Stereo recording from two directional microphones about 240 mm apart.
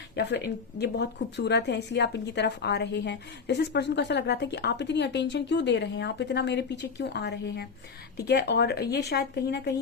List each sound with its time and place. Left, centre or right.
0.2 s a woman's voice: left